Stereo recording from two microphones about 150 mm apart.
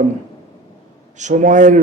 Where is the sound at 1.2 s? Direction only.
55° right (ahead or behind).